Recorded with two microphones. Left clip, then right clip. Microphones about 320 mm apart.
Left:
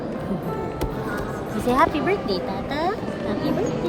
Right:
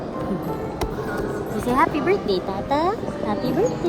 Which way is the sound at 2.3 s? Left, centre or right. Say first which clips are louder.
Right 3 dB; centre.